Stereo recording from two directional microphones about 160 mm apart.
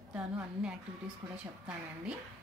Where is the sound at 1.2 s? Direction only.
20° right (ahead or behind).